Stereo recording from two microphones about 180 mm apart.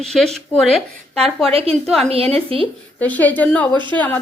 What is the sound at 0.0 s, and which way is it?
A woman's voice, centre (ahead or behind).